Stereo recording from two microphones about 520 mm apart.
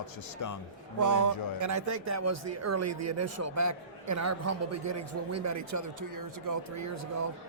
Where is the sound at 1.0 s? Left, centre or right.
Right.